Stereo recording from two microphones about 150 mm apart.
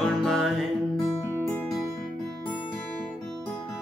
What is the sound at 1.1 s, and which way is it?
Music, 20° left (ahead or behind).